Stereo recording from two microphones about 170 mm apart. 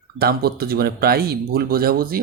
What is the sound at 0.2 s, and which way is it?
Speech, 65° right (ahead or behind).